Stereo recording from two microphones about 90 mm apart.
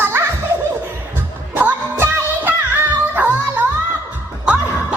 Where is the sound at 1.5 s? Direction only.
20° right (ahead or behind).